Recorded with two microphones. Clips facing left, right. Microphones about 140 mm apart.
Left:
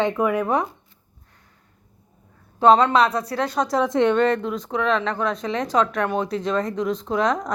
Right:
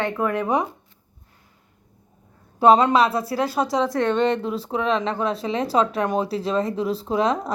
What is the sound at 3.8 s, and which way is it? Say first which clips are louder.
Speech: left 3 dB; 20° left (ahead or behind).